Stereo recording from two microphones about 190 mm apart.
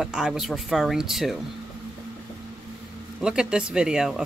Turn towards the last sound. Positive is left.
turn(degrees=-5)  # may be behind; listen again after turning